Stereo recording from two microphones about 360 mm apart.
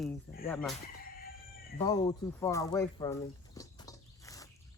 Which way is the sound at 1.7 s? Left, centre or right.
Centre.